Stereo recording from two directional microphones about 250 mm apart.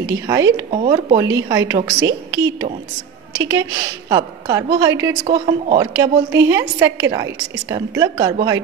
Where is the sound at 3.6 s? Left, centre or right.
Centre.